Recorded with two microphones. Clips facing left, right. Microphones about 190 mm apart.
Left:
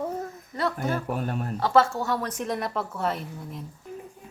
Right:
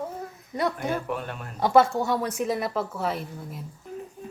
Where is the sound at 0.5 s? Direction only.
15° right (ahead or behind).